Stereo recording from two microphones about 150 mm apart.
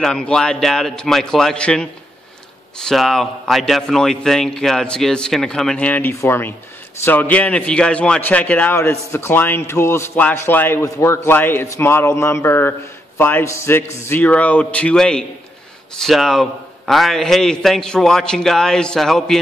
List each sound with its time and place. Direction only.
0.0 s a man's voice: 5° left (ahead or behind)